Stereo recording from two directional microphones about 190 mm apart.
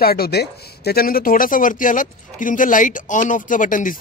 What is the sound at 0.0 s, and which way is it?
Speech, 55° left (ahead or behind).